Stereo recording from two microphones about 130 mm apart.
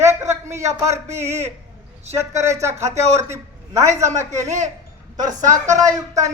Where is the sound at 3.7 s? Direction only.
25° right (ahead or behind).